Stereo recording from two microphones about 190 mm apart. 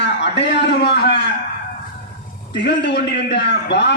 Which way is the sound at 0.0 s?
65° left (ahead or behind).